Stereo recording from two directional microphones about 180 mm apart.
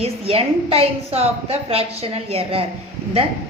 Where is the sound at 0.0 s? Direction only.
35° right (ahead or behind).